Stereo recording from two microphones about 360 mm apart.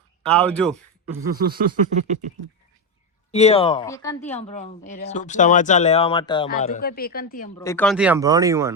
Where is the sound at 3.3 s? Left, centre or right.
Centre.